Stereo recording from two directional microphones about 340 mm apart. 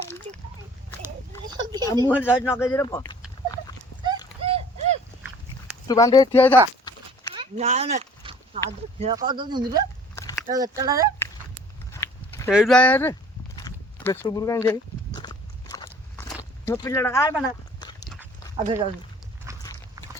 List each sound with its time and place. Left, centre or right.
1.0 s a sound: centre
2.0 s speech: centre
2.4 s speech: centre
4.4 s rowboat: centre
5.9 s speech: centre
7.3 s speech: centre
10.2 s a sound: centre
10.4 s speech: centre
11.9 s a sound: centre
12.5 s speech: centre
13.6 s a sound: centre
17.7 s dog: centre
18.5 s speech: centre
19.5 s horse: centre